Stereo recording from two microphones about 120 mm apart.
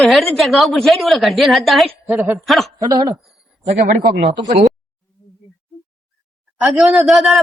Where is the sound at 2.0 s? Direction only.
15° right (ahead or behind).